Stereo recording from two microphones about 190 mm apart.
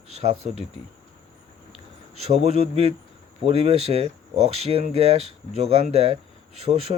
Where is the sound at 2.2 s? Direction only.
35° right (ahead or behind).